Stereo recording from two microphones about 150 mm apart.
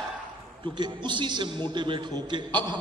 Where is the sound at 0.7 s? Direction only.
30° right (ahead or behind).